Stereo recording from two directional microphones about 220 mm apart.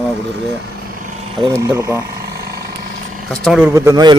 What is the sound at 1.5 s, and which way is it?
Speech, 15° right (ahead or behind).